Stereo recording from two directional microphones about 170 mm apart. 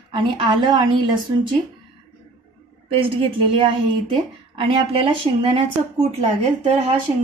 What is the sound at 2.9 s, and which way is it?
A woman's voice, 30° right (ahead or behind).